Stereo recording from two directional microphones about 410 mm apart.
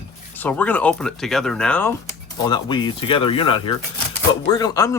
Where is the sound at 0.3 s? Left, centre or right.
Centre.